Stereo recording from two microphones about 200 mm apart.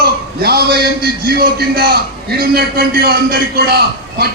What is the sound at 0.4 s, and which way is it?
A man's voice, 50° right (ahead or behind).